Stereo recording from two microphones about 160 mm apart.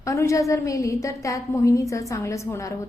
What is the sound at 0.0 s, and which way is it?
A woman's voice, 20° left (ahead or behind).